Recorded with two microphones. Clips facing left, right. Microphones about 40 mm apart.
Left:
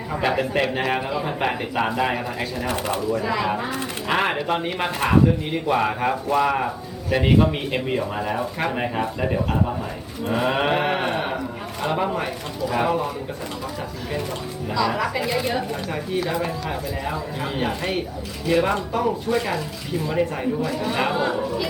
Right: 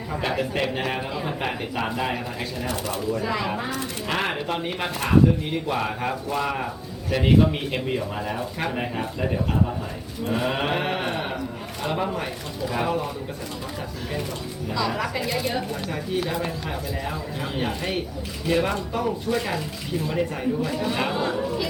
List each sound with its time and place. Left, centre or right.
0.1 s speech: centre
2.6 s speech: left
3.2 s speech: centre; by 12.3 s left
12.6 s speech: centre
14.8 s speech: centre
15.2 s speech: centre